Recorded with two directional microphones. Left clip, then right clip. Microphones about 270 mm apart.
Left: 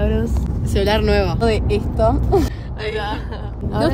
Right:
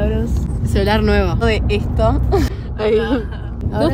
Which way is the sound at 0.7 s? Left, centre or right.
Centre.